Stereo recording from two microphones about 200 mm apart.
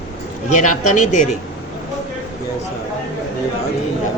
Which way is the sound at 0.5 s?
40° left (ahead or behind).